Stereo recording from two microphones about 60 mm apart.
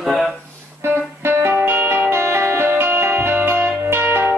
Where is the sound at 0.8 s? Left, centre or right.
Right.